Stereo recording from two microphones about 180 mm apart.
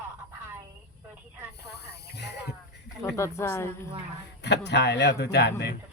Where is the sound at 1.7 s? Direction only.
65° left (ahead or behind).